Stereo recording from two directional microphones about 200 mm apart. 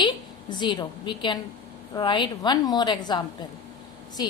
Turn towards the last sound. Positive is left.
turn(degrees=20)  # may be behind; listen again after turning